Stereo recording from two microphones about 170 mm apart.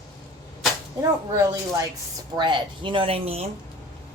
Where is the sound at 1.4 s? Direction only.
20° right (ahead or behind); by 3.5 s 35° right (ahead or behind).